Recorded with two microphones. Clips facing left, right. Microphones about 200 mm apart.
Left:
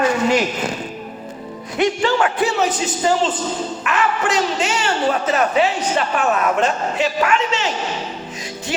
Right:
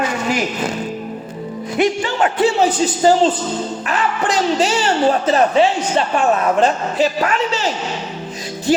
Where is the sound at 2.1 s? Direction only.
25° right (ahead or behind).